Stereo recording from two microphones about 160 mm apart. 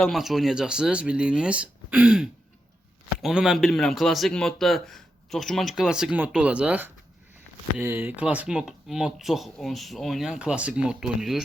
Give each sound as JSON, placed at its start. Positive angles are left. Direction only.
{"t": 0.0, "sound": "a man's voice", "side_deg": 0}